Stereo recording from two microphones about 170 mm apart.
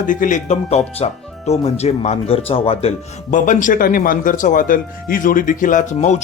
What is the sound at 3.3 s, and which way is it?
A man's voice, 50° left (ahead or behind).